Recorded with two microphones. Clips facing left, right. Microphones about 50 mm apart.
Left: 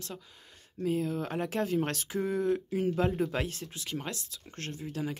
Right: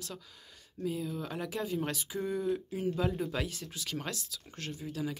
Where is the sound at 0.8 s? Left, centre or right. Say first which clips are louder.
Left 5 dB; left.